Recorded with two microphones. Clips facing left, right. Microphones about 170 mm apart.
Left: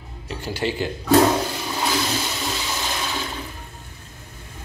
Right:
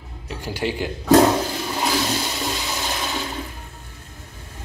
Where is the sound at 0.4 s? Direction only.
15° right (ahead or behind).